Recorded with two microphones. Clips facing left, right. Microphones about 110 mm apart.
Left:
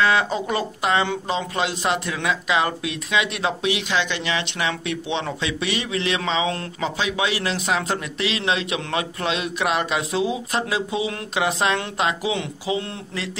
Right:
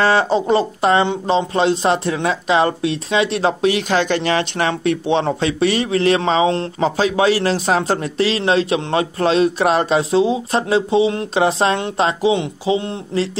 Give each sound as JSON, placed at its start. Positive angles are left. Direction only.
{"t": 0.0, "sound": "speech", "side_deg": -35}